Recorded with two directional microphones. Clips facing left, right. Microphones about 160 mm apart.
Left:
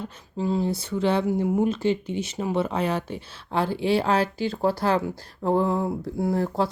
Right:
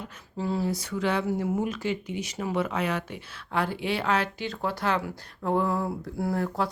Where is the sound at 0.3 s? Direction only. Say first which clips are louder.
Left 3 dB; 20° left (ahead or behind).